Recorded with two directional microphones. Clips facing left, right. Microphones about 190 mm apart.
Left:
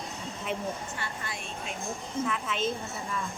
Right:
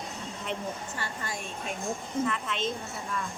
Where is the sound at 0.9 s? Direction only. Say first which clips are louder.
Right 1 dB; 40° right (ahead or behind).